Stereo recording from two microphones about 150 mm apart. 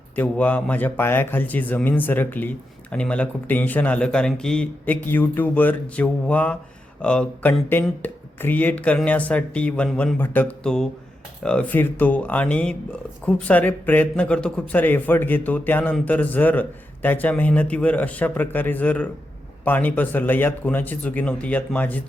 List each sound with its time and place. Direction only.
0.2 s a man's voice: 10° left (ahead or behind)